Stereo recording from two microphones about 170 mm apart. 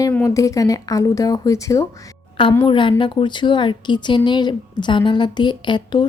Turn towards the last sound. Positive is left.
turn(degrees=25)  # may be behind; listen again after turning